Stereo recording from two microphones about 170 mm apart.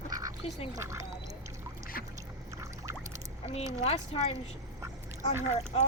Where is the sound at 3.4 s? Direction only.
35° left (ahead or behind).